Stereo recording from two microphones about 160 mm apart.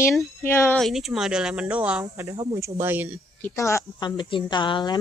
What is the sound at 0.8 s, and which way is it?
Speech, centre (ahead or behind).